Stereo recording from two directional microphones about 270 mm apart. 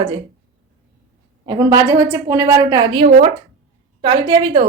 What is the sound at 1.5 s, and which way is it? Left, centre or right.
A woman's voice, centre.